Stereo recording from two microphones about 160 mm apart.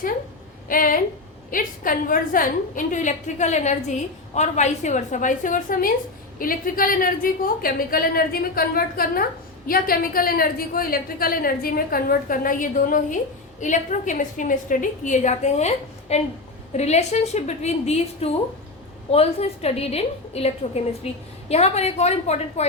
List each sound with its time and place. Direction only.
0.7 s a woman's voice: 60° left (ahead or behind); by 22.6 s 45° left (ahead or behind)